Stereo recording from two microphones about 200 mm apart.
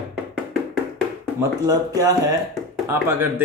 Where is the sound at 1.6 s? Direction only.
15° right (ahead or behind).